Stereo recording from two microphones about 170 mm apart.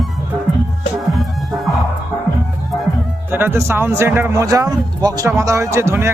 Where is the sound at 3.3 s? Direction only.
10° right (ahead or behind).